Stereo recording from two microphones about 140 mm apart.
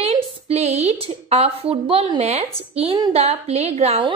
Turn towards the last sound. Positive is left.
turn(degrees=-50)  # may be behind; listen again after turning